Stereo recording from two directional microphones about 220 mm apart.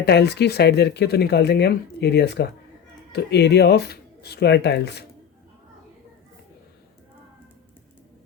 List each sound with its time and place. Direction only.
0.0 s speech: 50° left (ahead or behind)